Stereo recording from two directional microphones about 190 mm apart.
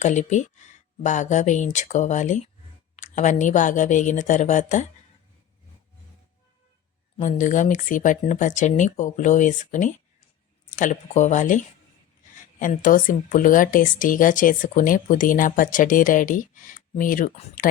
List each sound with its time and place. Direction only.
0.0 s speech: 40° left (ahead or behind)
7.2 s speech: 40° left (ahead or behind)